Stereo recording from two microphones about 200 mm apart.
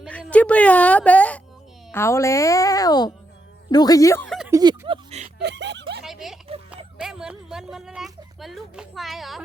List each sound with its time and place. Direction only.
0.0 s a woman's voice: 5° left (ahead or behind)
4.3 s a sound: 5° right (ahead or behind)
4.5 s speech: 20° right (ahead or behind)
5.4 s speech: 60° right (ahead or behind)
6.0 s speech: centre (ahead or behind)